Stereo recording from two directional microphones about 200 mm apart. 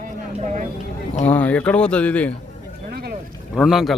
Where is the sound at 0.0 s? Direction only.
35° right (ahead or behind).